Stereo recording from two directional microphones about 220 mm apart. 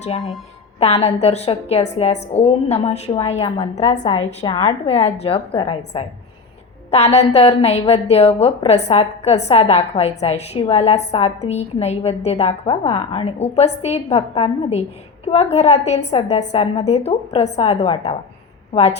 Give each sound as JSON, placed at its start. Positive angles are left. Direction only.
{"t": 0.8, "sound": "a woman's voice", "side_deg": 30}